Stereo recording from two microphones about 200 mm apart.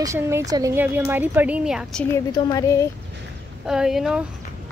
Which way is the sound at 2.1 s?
15° left (ahead or behind).